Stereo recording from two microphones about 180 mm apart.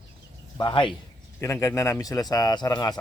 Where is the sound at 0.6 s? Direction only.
25° left (ahead or behind).